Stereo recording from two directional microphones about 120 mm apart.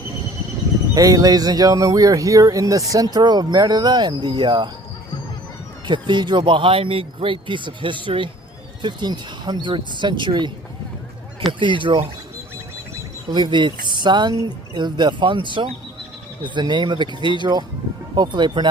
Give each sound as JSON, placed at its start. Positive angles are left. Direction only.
{"t": 0.9, "sound": "speech", "side_deg": -30}
{"t": 5.8, "sound": "speech", "side_deg": -40}
{"t": 11.6, "sound": "speech", "side_deg": -45}
{"t": 13.3, "sound": "speech", "side_deg": -40}